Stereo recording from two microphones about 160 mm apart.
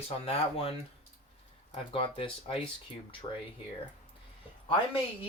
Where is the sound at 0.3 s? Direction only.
35° left (ahead or behind).